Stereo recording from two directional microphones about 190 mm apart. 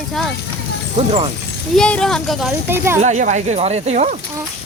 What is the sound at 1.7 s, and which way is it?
Speech, 5° left (ahead or behind).